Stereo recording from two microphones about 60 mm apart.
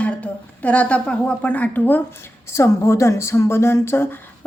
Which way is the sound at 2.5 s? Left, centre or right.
Left.